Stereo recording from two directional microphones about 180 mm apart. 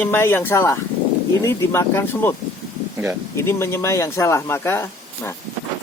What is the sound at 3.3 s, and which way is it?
Speech, 15° left (ahead or behind).